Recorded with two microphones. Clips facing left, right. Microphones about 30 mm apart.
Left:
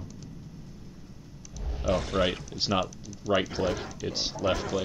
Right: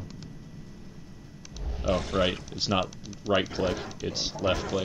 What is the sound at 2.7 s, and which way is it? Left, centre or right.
Speech, right.